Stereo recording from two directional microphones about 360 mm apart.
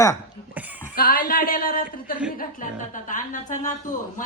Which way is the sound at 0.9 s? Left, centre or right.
Left.